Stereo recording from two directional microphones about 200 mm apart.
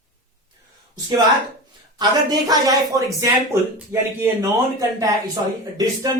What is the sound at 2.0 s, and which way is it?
Speech, 20° right (ahead or behind).